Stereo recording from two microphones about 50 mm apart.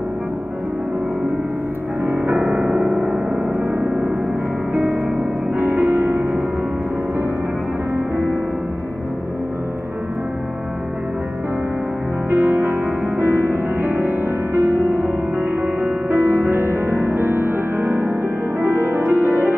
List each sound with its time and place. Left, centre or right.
2.0 s music: right
4.7 s music: right
12.3 s music: right